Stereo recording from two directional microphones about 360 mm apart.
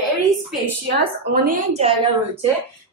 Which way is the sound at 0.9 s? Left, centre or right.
Right.